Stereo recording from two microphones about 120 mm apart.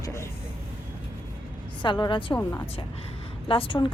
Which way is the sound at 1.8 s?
40° left (ahead or behind).